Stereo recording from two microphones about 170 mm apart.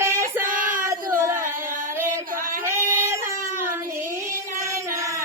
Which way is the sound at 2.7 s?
15° right (ahead or behind).